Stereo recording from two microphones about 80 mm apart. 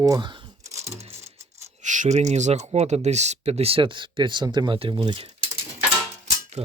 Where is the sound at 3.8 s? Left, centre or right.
Right.